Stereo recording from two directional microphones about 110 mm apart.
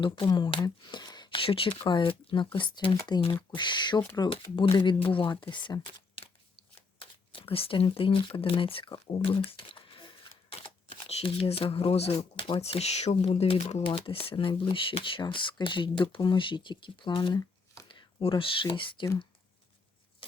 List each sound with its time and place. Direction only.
0.0 s speech: 45° left (ahead or behind)
6.7 s speech: 55° left (ahead or behind)
10.5 s speech: 60° left (ahead or behind)
13.8 s speech: 55° left (ahead or behind)